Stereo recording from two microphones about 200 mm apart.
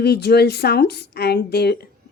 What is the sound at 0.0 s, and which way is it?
A woman's voice, 55° left (ahead or behind).